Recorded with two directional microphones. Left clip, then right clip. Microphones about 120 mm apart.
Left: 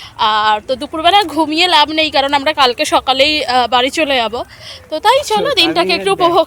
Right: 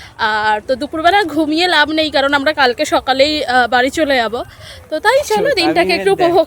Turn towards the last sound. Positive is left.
turn(degrees=-25)  # may be behind; listen again after turning